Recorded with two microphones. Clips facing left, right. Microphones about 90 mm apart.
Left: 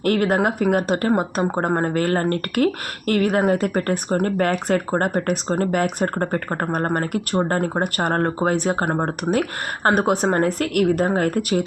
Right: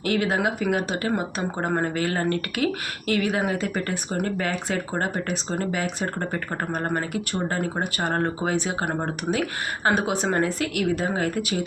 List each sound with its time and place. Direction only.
0.0 s speech: 50° left (ahead or behind)